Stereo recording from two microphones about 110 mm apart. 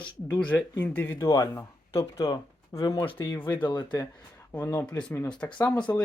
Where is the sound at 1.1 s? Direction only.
35° left (ahead or behind).